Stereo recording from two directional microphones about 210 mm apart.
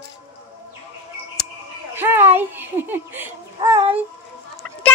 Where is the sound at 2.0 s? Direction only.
10° right (ahead or behind).